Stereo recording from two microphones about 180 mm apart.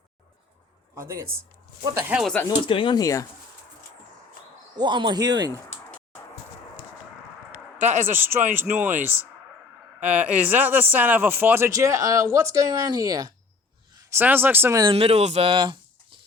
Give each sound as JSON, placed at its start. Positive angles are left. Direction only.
{"t": 0.9, "sound": "speech", "side_deg": -15}
{"t": 2.1, "sound": "speech", "side_deg": 5}
{"t": 2.5, "sound": "speech", "side_deg": 30}
{"t": 4.8, "sound": "speech", "side_deg": -25}
{"t": 7.9, "sound": "a man's voice", "side_deg": -45}
{"t": 8.2, "sound": "speech", "side_deg": -10}
{"t": 10.0, "sound": "speech", "side_deg": -10}
{"t": 14.8, "sound": "speech", "side_deg": -35}